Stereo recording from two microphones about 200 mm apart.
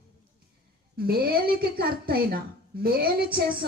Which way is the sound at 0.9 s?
50° right (ahead or behind).